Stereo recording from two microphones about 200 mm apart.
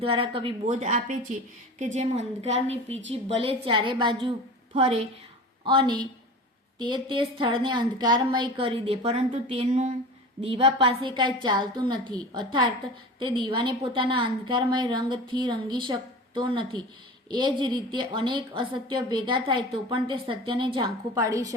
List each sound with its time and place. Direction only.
0.0 s a woman's voice: 25° right (ahead or behind)